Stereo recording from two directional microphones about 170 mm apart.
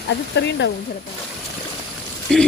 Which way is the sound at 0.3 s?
90° left.